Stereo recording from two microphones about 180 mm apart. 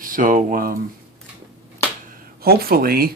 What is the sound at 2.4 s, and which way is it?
Speech, 55° right (ahead or behind).